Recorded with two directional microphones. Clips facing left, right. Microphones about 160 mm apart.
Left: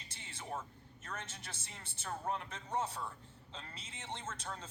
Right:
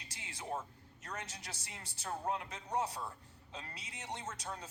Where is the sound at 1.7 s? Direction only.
15° right (ahead or behind).